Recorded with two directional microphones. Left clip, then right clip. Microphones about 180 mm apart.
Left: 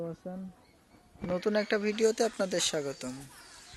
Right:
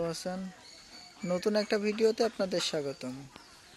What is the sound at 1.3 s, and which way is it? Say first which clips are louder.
Speech: even; 5° right (ahead or behind).